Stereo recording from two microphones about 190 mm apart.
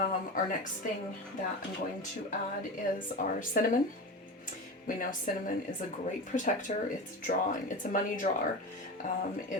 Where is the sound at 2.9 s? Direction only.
45° left (ahead or behind).